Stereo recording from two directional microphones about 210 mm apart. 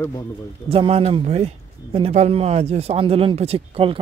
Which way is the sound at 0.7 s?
25° right (ahead or behind).